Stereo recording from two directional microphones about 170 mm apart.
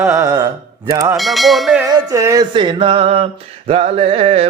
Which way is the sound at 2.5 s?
30° right (ahead or behind).